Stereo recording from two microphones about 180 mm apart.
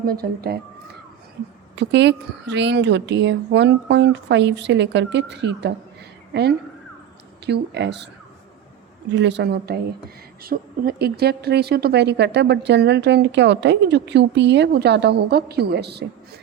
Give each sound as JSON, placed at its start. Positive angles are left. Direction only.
{"t": 0.0, "sound": "speech", "side_deg": -55}
{"t": 1.7, "sound": "a woman's voice", "side_deg": -75}
{"t": 9.1, "sound": "a woman's voice", "side_deg": -75}
{"t": 10.4, "sound": "a woman's voice", "side_deg": -55}